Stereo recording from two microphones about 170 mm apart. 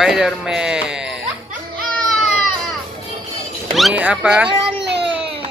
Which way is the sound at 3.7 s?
5° right (ahead or behind).